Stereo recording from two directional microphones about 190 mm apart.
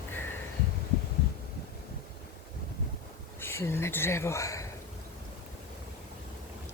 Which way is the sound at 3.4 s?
15° left (ahead or behind).